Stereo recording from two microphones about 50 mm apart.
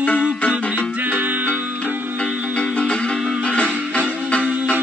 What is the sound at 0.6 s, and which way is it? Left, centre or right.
Music, left.